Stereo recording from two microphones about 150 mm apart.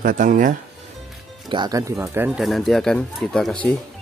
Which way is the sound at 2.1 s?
15° right (ahead or behind).